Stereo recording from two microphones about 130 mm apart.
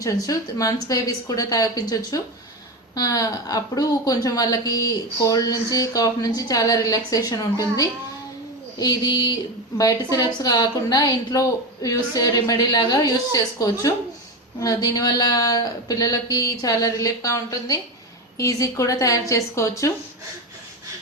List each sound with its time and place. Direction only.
0.0 s a woman's voice: 25° left (ahead or behind)